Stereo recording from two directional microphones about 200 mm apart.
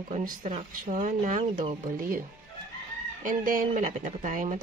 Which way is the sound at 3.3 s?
40° right (ahead or behind).